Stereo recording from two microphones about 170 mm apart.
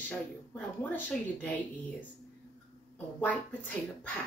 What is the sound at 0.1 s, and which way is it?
Speech, 10° left (ahead or behind).